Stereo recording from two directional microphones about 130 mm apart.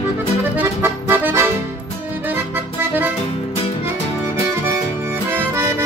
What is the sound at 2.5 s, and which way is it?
Accordion, 15° right (ahead or behind).